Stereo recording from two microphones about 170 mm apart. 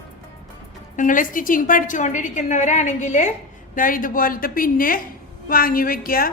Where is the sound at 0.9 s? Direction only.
50° left (ahead or behind).